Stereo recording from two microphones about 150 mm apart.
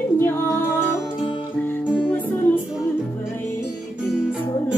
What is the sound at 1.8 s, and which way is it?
Music, 5° right (ahead or behind).